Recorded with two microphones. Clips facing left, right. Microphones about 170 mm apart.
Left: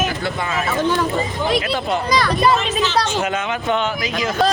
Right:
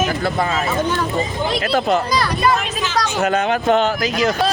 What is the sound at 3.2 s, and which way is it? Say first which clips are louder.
Speech: right 5 dB; 40° right (ahead or behind).